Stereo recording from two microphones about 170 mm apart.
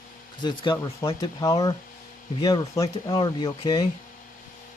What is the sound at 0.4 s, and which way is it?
Speech, 25° left (ahead or behind).